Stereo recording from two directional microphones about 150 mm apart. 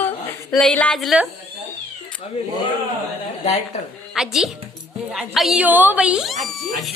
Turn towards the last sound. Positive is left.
turn(degrees=0)  # may be behind; listen again after turning